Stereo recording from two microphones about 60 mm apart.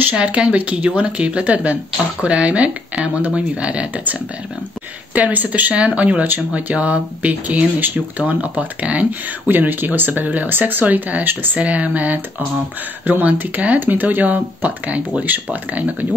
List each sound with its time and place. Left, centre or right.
0.1 s speech: centre
5.1 s speech: right
9.5 s speech: right